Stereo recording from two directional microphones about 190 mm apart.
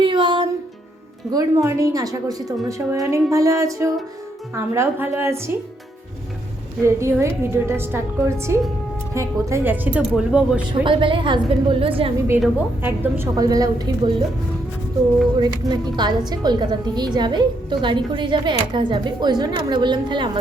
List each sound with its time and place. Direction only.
0.0 s music: 25° right (ahead or behind)
1.3 s a woman's voice: 15° right (ahead or behind)
6.8 s a woman's voice: 15° right (ahead or behind)
10.7 s a woman's voice: 25° right (ahead or behind)
12.4 s a woman's voice: 10° right (ahead or behind)
15.4 s a woman's voice: 20° right (ahead or behind)